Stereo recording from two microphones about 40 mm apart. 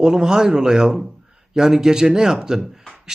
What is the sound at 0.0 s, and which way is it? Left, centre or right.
A man's voice, centre.